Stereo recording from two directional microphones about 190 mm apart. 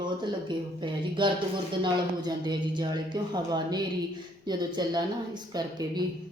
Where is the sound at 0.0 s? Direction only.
25° right (ahead or behind).